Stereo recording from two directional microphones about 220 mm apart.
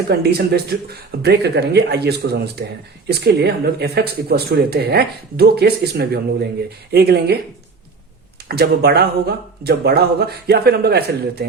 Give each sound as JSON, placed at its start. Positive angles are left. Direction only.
{"t": 0.1, "sound": "speech", "side_deg": -45}
{"t": 8.4, "sound": "speech", "side_deg": -45}